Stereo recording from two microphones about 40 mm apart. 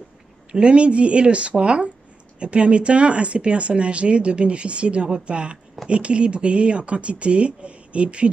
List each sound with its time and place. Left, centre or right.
0.5 s speech: right